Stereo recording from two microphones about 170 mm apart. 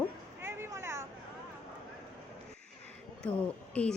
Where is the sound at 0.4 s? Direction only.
15° right (ahead or behind).